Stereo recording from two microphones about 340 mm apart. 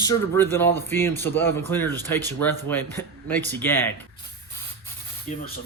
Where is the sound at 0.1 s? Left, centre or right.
Centre.